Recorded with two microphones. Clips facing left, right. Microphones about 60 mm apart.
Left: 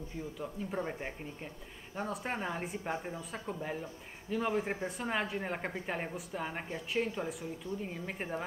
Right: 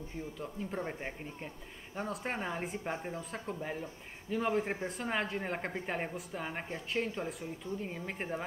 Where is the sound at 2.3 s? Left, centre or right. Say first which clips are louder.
Even; centre.